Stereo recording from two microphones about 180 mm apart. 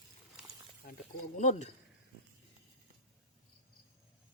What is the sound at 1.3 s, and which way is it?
Speech, 40° left (ahead or behind).